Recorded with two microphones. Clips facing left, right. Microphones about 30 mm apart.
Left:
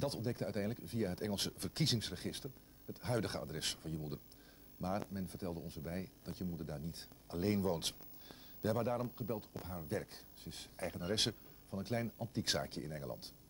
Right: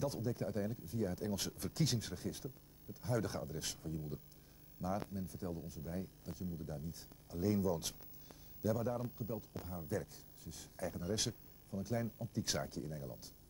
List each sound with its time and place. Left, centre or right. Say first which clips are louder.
0.0 s speech: even; left